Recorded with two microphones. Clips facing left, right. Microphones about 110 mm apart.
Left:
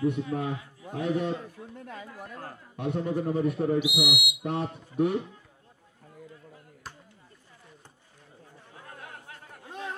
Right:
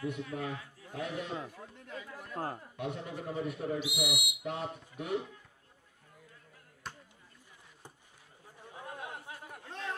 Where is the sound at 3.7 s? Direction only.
15° left (ahead or behind).